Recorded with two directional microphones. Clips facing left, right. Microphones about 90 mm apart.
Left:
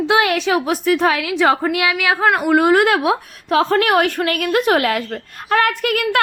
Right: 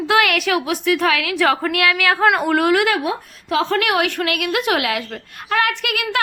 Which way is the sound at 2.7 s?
45° left (ahead or behind).